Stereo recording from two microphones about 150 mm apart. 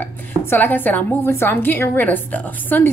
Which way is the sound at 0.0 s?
10° left (ahead or behind).